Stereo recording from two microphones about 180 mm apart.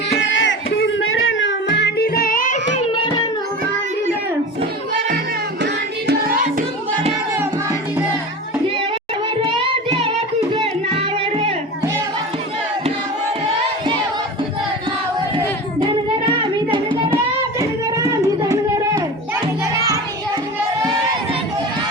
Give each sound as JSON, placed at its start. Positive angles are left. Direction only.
{"t": 0.2, "sound": "music", "side_deg": 85}
{"t": 2.7, "sound": "a sound", "side_deg": 30}
{"t": 5.6, "sound": "music", "side_deg": -60}
{"t": 9.5, "sound": "carnatic music", "side_deg": -30}
{"t": 10.5, "sound": "music", "side_deg": -30}
{"t": 16.7, "sound": "child singing", "side_deg": -25}
{"t": 17.6, "sound": "music", "side_deg": -20}